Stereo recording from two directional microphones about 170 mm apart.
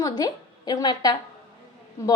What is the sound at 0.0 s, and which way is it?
A woman's voice, 25° left (ahead or behind).